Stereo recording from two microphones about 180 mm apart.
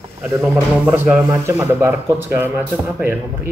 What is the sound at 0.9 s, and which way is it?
Speech, 15° right (ahead or behind).